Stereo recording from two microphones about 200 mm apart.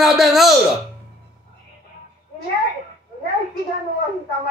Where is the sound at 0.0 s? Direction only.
Centre (ahead or behind).